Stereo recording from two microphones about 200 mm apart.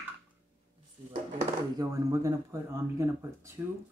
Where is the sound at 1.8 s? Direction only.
15° right (ahead or behind).